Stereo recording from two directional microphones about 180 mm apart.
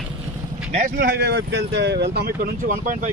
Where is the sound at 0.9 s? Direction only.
60° right (ahead or behind).